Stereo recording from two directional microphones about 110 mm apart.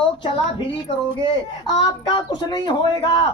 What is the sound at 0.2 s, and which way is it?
A woman's voice, 50° left (ahead or behind).